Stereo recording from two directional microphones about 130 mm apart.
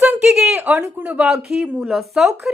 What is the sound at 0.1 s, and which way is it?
Speech, 5° right (ahead or behind).